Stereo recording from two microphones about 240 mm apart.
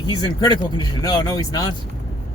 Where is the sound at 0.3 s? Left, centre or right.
Centre.